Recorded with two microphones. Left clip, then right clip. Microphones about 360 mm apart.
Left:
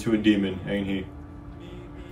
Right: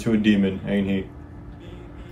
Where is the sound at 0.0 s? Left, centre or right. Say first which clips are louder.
Right 1 dB; centre.